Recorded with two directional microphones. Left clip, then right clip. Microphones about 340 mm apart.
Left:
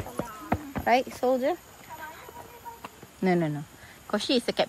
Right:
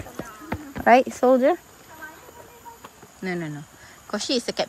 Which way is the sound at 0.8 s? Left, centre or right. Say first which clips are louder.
Right 8 dB; right.